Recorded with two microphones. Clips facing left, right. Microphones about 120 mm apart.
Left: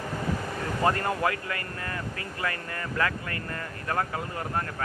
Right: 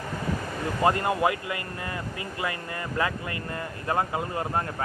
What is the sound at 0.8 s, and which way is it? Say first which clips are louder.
Speech: right 3 dB; 15° right (ahead or behind).